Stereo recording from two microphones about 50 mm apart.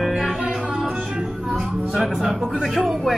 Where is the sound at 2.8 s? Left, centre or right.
Centre.